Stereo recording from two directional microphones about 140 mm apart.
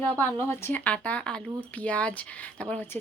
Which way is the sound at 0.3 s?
20° left (ahead or behind).